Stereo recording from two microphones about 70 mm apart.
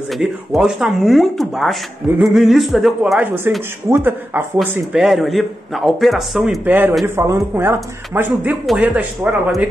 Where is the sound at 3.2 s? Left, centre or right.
Right.